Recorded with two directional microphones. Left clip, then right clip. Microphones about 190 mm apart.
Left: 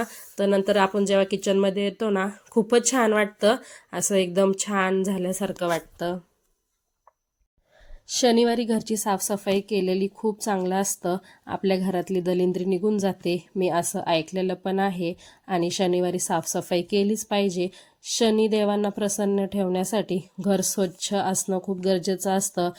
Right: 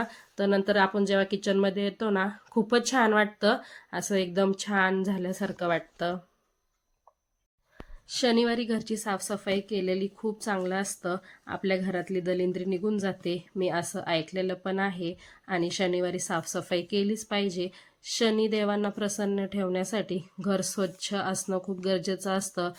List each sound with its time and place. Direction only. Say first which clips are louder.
0.0 s speech: left 4 dB; 10° left (ahead or behind)
8.0 s a woman's voice: left 5 dB; 25° left (ahead or behind)